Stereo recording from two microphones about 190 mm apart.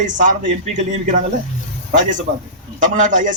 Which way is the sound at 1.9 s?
40° right (ahead or behind).